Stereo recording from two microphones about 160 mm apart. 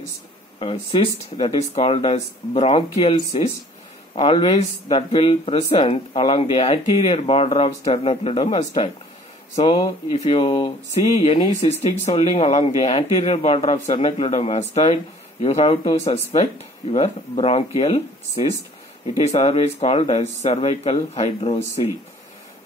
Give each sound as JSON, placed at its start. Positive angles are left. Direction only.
{"t": 0.6, "sound": "speech", "side_deg": 35}
{"t": 12.1, "sound": "speech", "side_deg": 40}